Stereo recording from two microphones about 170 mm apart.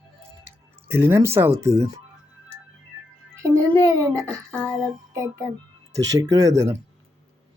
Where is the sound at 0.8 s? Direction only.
15° right (ahead or behind).